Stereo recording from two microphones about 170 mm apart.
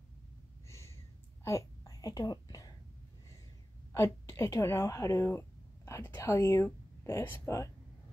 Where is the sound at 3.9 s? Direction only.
15° left (ahead or behind).